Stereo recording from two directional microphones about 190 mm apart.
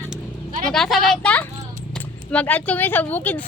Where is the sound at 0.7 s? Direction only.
Centre (ahead or behind).